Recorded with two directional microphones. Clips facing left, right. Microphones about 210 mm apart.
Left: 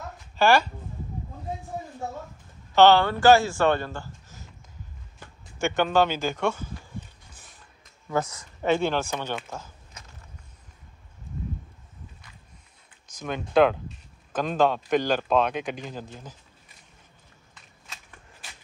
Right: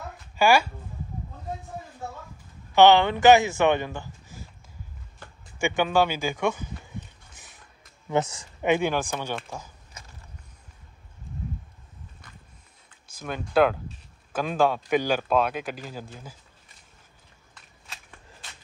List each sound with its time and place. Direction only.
0.4 s speech: 10° right (ahead or behind)
2.7 s speech: 15° right (ahead or behind)
5.6 s speech: 10° right (ahead or behind)
8.1 s speech: 25° right (ahead or behind)
8.6 s speech: 15° right (ahead or behind)
13.1 s speech: 5° right (ahead or behind)